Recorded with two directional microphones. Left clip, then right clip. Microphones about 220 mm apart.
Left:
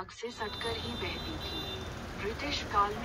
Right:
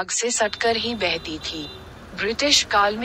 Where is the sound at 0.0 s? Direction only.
60° right (ahead or behind).